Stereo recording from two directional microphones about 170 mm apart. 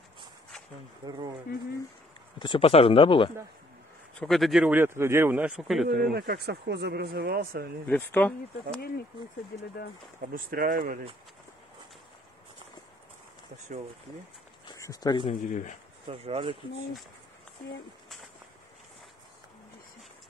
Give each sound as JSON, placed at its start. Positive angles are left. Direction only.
{"t": 1.0, "sound": "speech", "side_deg": -25}
{"t": 2.3, "sound": "speech", "side_deg": 30}
{"t": 4.2, "sound": "speech", "side_deg": 0}
{"t": 6.1, "sound": "speech", "side_deg": -70}
{"t": 7.9, "sound": "speech", "side_deg": 10}
{"t": 10.3, "sound": "speech", "side_deg": -55}
{"t": 14.8, "sound": "speech", "side_deg": 20}
{"t": 15.4, "sound": "speech", "side_deg": 45}
{"t": 16.1, "sound": "speech", "side_deg": -35}